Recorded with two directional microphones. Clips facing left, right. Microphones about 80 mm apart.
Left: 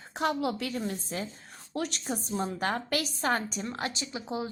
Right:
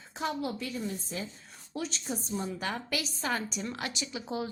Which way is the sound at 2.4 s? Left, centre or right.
Left.